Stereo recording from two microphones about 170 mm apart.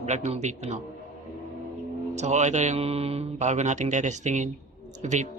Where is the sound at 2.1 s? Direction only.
45° right (ahead or behind).